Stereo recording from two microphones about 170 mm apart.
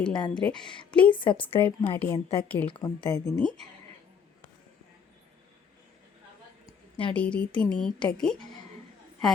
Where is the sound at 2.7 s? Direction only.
25° left (ahead or behind).